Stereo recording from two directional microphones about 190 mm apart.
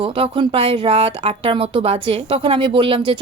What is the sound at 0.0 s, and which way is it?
Speech, 30° right (ahead or behind).